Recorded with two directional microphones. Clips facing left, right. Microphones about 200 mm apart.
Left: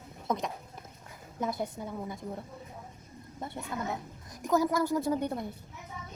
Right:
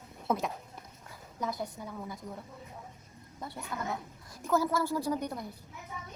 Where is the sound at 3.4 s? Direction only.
25° left (ahead or behind).